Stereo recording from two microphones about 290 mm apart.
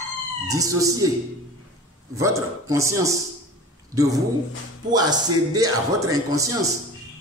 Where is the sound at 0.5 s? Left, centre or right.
Centre.